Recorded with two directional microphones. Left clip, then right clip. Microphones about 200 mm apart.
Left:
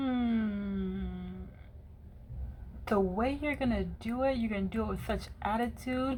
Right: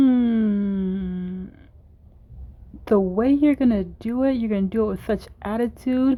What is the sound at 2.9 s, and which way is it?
Speech, 45° right (ahead or behind).